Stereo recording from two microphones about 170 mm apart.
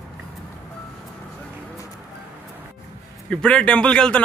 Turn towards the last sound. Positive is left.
turn(degrees=5)  # may be behind; listen again after turning